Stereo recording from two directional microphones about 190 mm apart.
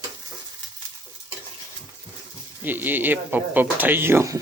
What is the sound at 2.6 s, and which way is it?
Speech, 10° right (ahead or behind).